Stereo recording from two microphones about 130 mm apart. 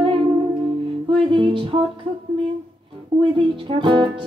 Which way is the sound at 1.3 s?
40° right (ahead or behind).